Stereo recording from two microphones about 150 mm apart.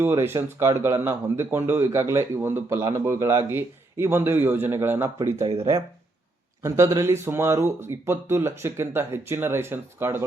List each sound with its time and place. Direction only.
0.0 s speech: 15° right (ahead or behind)
6.6 s speech: 20° right (ahead or behind)